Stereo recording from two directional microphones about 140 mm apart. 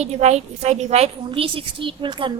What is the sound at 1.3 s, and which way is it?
A woman's voice, 40° right (ahead or behind).